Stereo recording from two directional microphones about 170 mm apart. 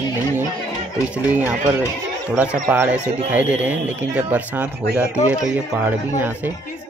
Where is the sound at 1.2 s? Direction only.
10° right (ahead or behind).